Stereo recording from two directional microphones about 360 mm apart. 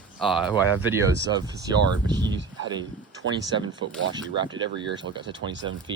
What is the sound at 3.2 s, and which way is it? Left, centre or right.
Speech, right.